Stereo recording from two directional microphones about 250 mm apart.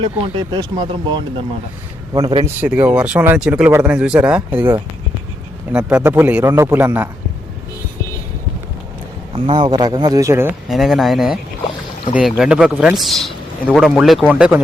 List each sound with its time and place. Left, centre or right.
0.0 s speech: centre
2.6 s a man's voice: centre
5.7 s speech: centre
9.3 s a man's voice: right; by 14.6 s centre